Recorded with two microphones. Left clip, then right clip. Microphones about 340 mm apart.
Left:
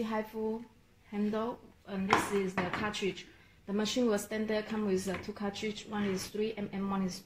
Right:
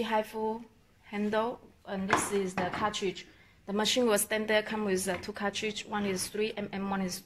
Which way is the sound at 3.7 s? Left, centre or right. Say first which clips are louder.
Right 4 dB; right.